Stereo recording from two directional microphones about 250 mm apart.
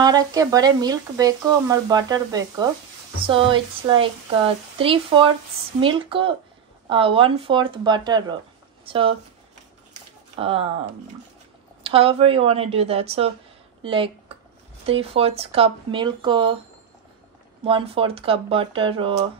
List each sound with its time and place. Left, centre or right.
0.0 s speech: centre
10.3 s speech: right
11.8 s speech: right
17.6 s speech: right